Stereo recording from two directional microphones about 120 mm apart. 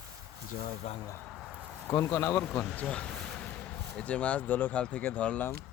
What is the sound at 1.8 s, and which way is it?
Speech, 15° left (ahead or behind).